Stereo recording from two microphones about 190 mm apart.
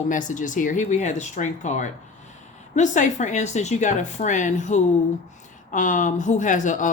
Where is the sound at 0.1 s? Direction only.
40° left (ahead or behind).